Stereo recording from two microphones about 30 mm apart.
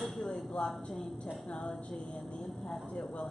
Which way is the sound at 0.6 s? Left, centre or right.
Left.